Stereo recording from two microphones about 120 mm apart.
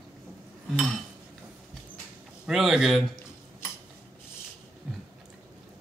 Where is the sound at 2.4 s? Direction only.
5° right (ahead or behind).